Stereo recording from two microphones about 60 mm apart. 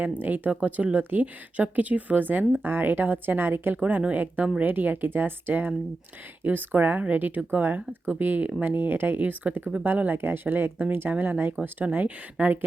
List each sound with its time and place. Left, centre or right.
0.2 s speech: right